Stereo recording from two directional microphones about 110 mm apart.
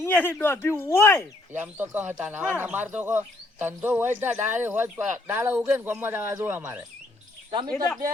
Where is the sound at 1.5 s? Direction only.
20° right (ahead or behind).